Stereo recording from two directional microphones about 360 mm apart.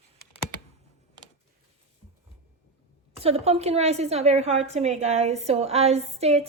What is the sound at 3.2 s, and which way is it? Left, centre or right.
A woman's voice, centre.